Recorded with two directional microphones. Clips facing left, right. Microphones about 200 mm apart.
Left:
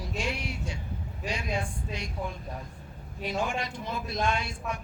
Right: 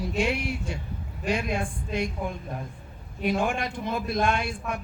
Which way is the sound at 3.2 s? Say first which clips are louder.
Right 5 dB; 55° right (ahead or behind).